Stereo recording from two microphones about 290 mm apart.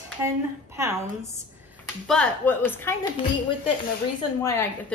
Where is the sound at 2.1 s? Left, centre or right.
Centre.